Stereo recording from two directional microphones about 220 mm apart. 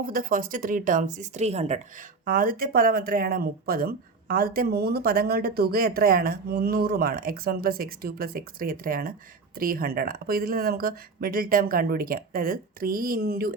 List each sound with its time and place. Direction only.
0.0 s speech: 40° right (ahead or behind)